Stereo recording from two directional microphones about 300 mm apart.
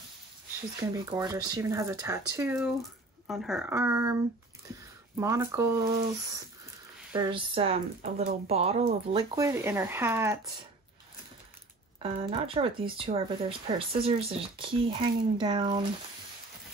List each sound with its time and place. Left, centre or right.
0.9 s speech: centre
5.2 s speech: centre
7.1 s speech: centre
12.0 s speech: centre